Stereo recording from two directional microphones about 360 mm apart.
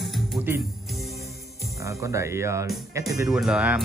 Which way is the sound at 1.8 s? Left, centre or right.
Centre.